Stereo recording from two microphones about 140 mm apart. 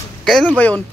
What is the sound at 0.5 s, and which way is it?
Speech, 10° left (ahead or behind).